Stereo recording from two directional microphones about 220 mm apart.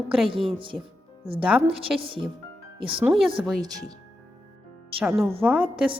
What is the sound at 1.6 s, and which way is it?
Speech, 25° right (ahead or behind).